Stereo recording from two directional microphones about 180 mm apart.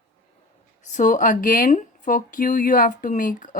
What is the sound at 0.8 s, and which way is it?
Speech, 45° left (ahead or behind).